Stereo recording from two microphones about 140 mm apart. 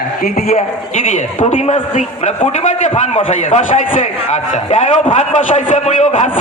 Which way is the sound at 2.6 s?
65° left (ahead or behind).